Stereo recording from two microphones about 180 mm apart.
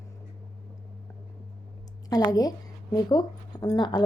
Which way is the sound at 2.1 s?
20° left (ahead or behind).